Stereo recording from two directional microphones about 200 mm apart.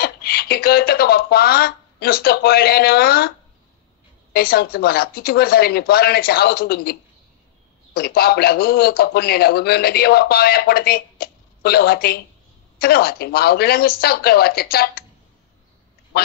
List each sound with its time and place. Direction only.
0.0 s a man's voice: 50° left (ahead or behind)